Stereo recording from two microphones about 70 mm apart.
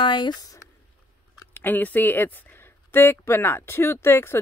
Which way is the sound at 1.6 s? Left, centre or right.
Left.